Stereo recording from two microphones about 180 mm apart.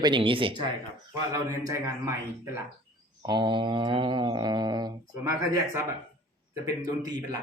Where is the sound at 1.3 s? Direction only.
15° right (ahead or behind).